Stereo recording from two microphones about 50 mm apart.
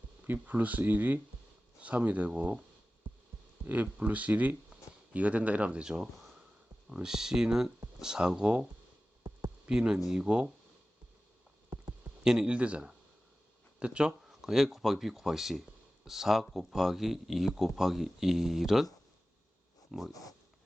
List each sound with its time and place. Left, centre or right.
0.3 s speech: right
3.7 s speech: right
12.2 s speech: centre
14.3 s speech: centre
19.9 s speech: centre